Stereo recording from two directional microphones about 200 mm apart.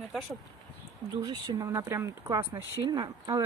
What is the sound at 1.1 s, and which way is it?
Speech, 20° right (ahead or behind).